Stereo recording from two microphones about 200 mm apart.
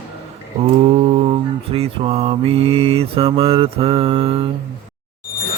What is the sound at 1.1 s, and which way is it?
Mantra, 30° right (ahead or behind).